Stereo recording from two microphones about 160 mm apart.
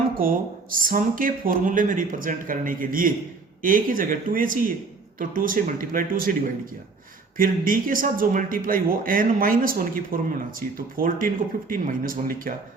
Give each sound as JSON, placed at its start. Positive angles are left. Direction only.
{"t": 0.2, "sound": "speech", "side_deg": -60}
{"t": 7.3, "sound": "speech", "side_deg": -60}